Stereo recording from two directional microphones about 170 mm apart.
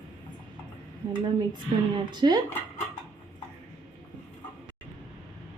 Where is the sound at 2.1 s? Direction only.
25° right (ahead or behind).